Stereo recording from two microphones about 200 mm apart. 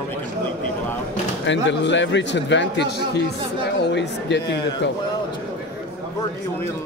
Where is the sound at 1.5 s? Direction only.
65° left (ahead or behind).